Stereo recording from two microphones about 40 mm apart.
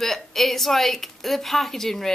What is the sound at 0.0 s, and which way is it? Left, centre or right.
A woman's voice, centre.